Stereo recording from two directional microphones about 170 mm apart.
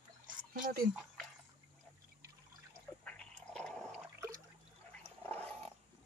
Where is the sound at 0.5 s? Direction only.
60° right (ahead or behind).